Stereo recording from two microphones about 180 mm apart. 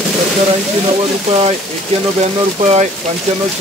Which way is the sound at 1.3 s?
35° right (ahead or behind).